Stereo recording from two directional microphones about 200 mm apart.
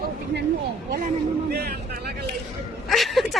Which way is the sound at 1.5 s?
50° right (ahead or behind).